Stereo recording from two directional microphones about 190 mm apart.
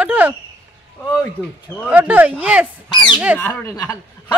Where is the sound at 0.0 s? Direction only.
10° right (ahead or behind).